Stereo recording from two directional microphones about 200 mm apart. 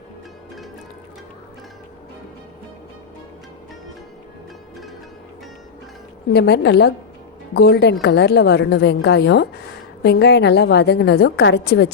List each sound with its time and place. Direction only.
6.3 s a woman's voice: 55° left (ahead or behind)